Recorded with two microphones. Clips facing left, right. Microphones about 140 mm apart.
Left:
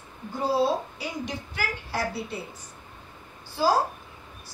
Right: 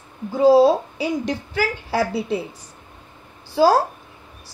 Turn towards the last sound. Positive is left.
turn(degrees=-90)